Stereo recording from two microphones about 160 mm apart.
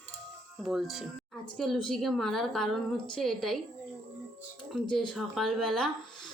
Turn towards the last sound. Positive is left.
turn(degrees=5)  # may be behind; listen again after turning